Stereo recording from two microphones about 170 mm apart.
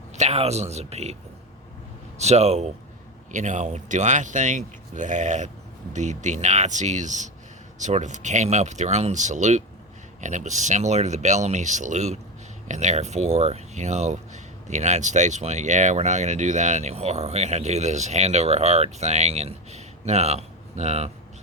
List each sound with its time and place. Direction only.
0.2 s speech: 40° right (ahead or behind)
2.1 s speech: 40° right (ahead or behind)